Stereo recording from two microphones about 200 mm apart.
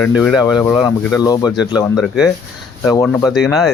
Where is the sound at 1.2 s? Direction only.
20° left (ahead or behind).